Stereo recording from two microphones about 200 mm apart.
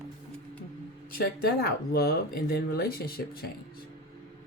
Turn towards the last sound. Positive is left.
turn(degrees=50)  # may be behind; listen again after turning